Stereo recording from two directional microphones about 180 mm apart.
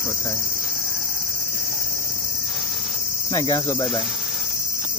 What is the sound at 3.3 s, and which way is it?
Cricket, 20° left (ahead or behind).